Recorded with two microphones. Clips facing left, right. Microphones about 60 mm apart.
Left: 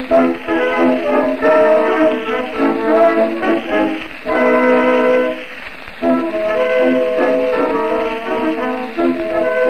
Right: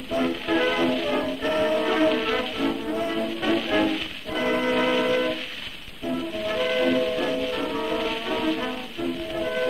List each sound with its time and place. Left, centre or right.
0.2 s music: left
1.9 s music: left
2.5 s music: left
2.8 s brass instrument: left
3.3 s music: left
4.3 s music: left
6.0 s music: left
6.5 s music: left
8.9 s music: left